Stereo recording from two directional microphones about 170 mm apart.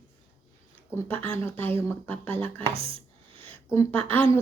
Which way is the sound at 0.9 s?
15° left (ahead or behind).